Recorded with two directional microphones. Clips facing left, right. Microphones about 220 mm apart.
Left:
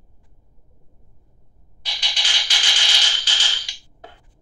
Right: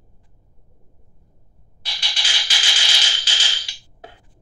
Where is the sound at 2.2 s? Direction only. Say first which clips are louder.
Right 1 dB; 5° right (ahead or behind).